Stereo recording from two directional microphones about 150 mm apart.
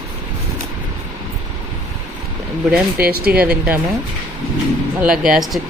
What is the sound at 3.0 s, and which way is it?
Speech, 90° right.